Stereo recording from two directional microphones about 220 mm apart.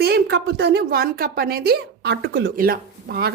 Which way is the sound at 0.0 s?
45° right (ahead or behind).